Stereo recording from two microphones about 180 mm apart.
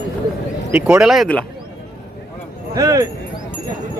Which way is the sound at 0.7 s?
5° right (ahead or behind).